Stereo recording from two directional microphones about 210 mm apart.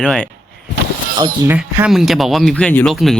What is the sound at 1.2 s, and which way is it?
Speech, 15° right (ahead or behind).